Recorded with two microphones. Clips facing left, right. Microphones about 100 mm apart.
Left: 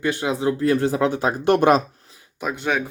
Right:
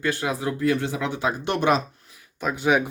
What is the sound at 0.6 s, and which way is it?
Speech, 40° left (ahead or behind).